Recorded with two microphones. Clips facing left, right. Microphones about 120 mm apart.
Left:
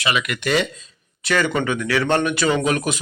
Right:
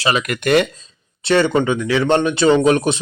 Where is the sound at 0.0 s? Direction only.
35° right (ahead or behind).